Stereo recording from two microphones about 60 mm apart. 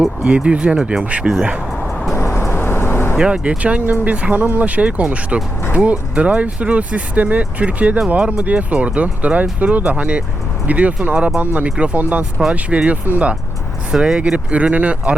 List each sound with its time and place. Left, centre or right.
0.2 s speech: centre
1.8 s vehicle: centre
2.1 s vehicle: left
3.2 s speech: centre
3.6 s speech: right
13.9 s speech: centre